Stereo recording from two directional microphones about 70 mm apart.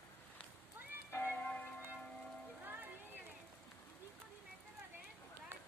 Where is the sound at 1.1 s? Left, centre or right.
Left.